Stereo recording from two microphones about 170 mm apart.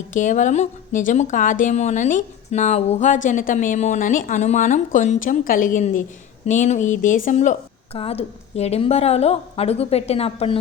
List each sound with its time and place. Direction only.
0.1 s speech: 50° left (ahead or behind)
7.9 s a woman's voice: 35° left (ahead or behind)